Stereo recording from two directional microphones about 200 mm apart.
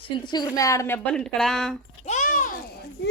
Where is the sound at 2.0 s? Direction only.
35° left (ahead or behind).